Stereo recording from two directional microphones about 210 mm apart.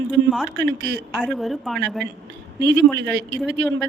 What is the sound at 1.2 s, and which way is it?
Speech, centre (ahead or behind).